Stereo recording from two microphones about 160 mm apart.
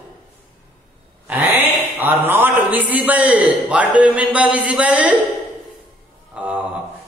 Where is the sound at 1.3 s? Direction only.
10° right (ahead or behind).